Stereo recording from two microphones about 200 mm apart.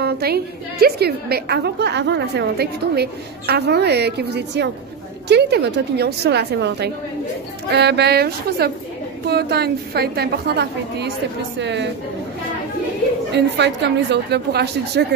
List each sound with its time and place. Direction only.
0.0 s a woman's voice: 50° right (ahead or behind)
13.3 s a woman's voice: 60° right (ahead or behind)